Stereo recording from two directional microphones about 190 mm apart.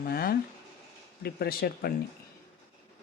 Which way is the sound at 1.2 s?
55° left (ahead or behind).